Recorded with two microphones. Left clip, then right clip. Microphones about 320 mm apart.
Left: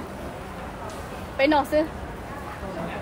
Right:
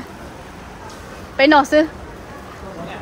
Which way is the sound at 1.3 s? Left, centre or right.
Right.